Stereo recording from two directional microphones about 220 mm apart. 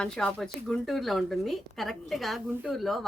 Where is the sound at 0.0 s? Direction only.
5° left (ahead or behind).